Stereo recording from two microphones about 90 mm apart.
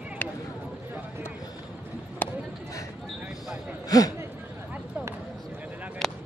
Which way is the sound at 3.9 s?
45° left (ahead or behind).